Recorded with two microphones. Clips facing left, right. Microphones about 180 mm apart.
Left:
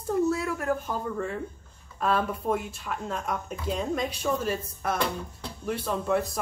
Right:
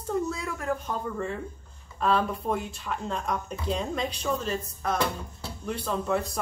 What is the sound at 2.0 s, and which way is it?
Speech, centre (ahead or behind).